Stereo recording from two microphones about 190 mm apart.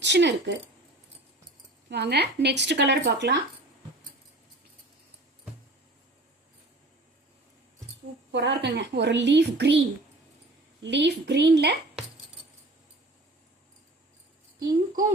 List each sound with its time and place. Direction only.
0.0 s a child's voice: 65° right (ahead or behind)
1.9 s a child's voice: 60° right (ahead or behind)
8.3 s a child's voice: 65° right (ahead or behind)
10.8 s a child's voice: 65° right (ahead or behind)